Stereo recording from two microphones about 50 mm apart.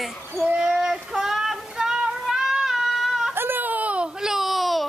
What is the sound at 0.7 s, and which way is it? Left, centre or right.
Child singing, centre.